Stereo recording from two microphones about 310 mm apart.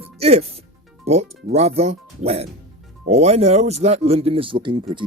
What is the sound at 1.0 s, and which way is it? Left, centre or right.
Speech, right.